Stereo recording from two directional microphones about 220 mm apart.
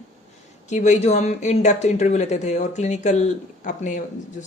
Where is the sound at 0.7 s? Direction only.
30° left (ahead or behind).